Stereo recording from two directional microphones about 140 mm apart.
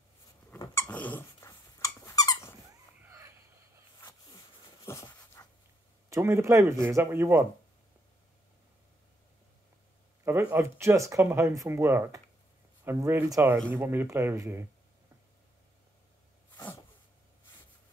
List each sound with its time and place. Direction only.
0.6 s dog: 15° left (ahead or behind)
1.5 s dog: 25° left (ahead or behind)
5.0 s dog: 25° left (ahead or behind)
6.0 s speech: 20° right (ahead or behind)
10.5 s speech: 15° right (ahead or behind)
16.5 s a sound: 20° left (ahead or behind)